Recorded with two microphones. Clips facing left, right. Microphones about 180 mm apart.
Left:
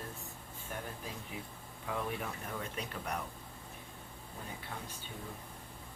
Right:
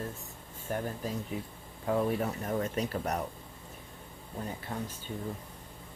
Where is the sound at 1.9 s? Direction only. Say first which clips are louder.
Right 9 dB; 40° right (ahead or behind).